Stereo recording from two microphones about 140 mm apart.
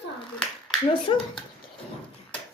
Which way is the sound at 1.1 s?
40° left (ahead or behind).